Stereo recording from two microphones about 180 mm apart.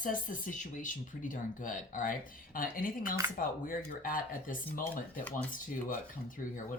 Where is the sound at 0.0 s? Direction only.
50° left (ahead or behind).